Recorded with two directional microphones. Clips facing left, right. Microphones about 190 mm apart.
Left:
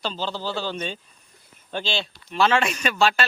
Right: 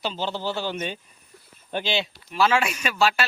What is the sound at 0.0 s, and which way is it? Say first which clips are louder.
A man's voice: right 1 dB; 15° right (ahead or behind).